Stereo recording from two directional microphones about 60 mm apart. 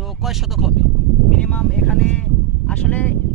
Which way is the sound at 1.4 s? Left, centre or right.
Left.